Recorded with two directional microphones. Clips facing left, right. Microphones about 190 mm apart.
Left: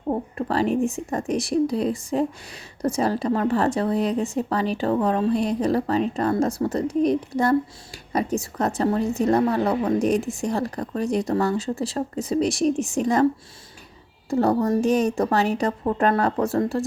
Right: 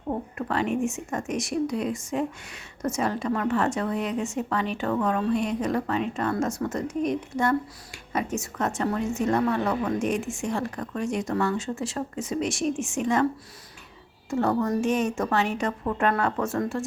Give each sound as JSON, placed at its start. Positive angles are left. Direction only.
{"t": 0.1, "sound": "speech", "side_deg": 35}
{"t": 14.3, "sound": "speech", "side_deg": 35}